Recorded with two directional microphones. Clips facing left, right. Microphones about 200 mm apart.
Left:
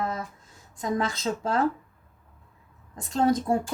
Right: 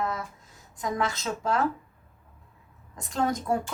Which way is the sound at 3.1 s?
30° left (ahead or behind).